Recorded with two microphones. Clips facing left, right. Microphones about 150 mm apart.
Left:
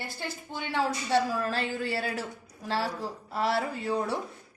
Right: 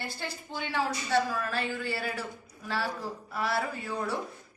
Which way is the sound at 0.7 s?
30° left (ahead or behind).